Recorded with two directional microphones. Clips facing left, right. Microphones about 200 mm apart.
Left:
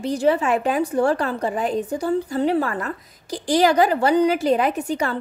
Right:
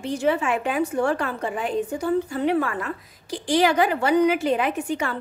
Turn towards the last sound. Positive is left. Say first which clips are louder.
# left 2 dB
turn(degrees=40)  # may be behind; listen again after turning